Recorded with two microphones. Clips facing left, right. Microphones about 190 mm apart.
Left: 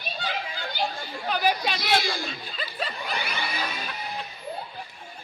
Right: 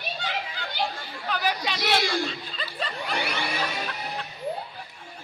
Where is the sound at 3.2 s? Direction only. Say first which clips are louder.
Right 4 dB; 75° right (ahead or behind).